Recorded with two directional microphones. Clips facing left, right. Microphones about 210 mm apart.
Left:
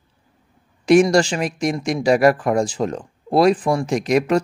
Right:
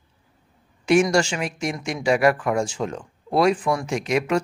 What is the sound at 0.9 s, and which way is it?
Speech, 35° left (ahead or behind).